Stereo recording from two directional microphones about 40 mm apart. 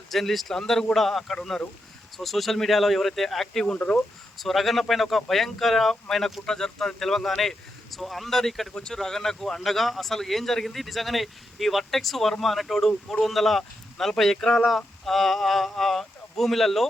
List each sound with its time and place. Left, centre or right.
0.1 s speech: centre
8.7 s speech: left
9.0 s speech: centre